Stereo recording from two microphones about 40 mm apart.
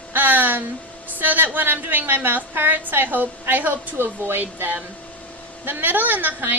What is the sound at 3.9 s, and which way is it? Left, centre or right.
Speech, right.